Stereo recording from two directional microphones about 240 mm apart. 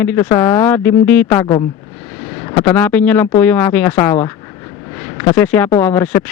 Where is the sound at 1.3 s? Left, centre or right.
Centre.